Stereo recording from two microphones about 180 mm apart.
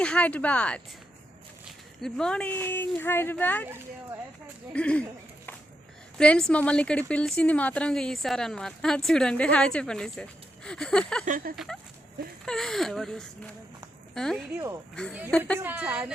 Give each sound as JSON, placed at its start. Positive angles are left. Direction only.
{"t": 0.0, "sound": "speech", "side_deg": 5}
{"t": 2.0, "sound": "speech", "side_deg": 0}
{"t": 4.7, "sound": "speech", "side_deg": 5}
{"t": 6.1, "sound": "a woman's voice", "side_deg": 5}
{"t": 11.3, "sound": "speech", "side_deg": -50}
{"t": 11.5, "sound": "a woman's voice", "side_deg": 0}
{"t": 14.5, "sound": "a woman's voice", "side_deg": -15}
{"t": 15.3, "sound": "speech", "side_deg": 5}
{"t": 15.5, "sound": "a woman's voice", "side_deg": -10}